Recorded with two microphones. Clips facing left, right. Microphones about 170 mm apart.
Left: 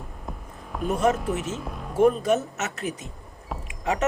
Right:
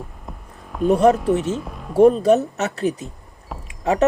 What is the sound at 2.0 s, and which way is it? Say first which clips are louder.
Speech: right 7 dB; 35° right (ahead or behind).